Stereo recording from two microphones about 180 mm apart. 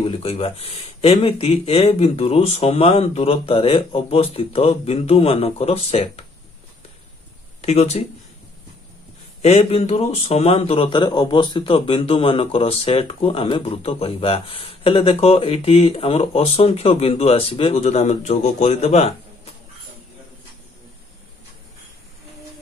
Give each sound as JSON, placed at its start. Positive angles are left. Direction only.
{"t": 0.0, "sound": "speech", "side_deg": 30}
{"t": 7.6, "sound": "speech", "side_deg": 35}
{"t": 9.4, "sound": "speech", "side_deg": 35}